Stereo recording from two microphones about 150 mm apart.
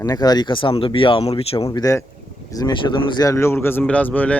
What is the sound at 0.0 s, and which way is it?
Speech, 25° left (ahead or behind).